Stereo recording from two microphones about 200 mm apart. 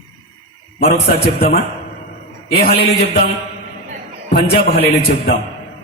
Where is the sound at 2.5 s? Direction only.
50° left (ahead or behind).